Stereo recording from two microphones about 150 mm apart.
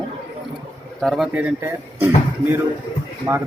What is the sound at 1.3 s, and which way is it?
Speech, 15° right (ahead or behind).